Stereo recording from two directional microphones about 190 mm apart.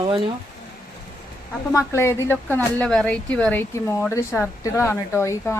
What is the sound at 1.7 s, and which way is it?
Speech, 15° left (ahead or behind).